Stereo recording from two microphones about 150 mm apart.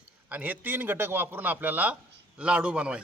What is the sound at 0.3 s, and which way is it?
A man's voice, 10° right (ahead or behind).